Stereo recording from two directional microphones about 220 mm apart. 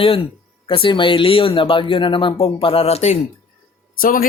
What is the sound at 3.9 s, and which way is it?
Speech, 40° left (ahead or behind).